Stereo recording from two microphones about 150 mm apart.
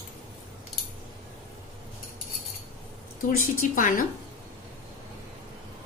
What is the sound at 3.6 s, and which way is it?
Speech, 65° left (ahead or behind).